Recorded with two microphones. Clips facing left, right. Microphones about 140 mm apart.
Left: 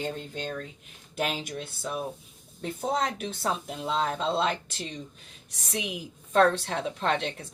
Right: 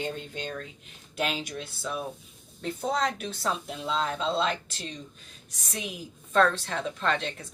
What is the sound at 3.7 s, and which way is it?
Speech, 50° left (ahead or behind).